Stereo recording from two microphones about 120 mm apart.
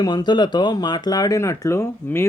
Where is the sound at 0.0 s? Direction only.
35° left (ahead or behind).